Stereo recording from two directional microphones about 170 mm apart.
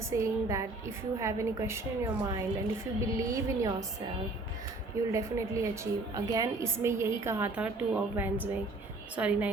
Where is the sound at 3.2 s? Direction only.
20° right (ahead or behind).